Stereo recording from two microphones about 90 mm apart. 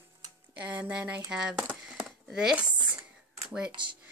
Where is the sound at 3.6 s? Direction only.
60° right (ahead or behind).